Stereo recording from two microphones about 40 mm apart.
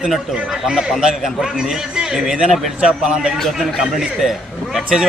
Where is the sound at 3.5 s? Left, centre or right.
Centre.